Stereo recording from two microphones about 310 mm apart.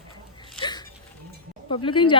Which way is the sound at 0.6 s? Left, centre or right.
Centre.